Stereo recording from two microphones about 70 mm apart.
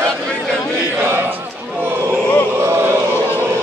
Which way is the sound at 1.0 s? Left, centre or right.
Right.